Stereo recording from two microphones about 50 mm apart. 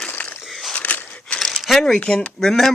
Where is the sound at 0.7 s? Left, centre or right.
Left.